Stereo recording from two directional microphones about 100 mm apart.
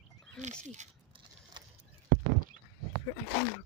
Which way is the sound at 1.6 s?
50° right (ahead or behind).